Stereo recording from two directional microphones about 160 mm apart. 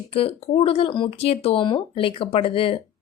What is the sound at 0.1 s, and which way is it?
A woman's voice, 35° left (ahead or behind).